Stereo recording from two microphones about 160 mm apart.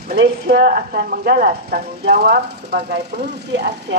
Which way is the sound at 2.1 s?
80° right.